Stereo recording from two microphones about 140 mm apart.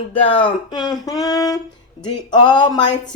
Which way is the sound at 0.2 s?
40° left (ahead or behind).